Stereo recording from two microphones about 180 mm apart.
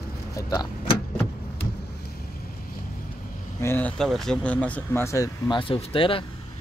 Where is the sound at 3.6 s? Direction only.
10° left (ahead or behind); by 6.3 s 30° left (ahead or behind).